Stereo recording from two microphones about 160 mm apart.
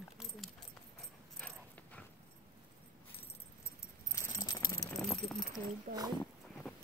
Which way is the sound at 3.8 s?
20° left (ahead or behind).